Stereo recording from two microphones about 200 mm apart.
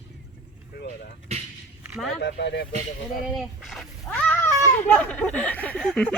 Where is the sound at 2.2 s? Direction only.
60° left (ahead or behind).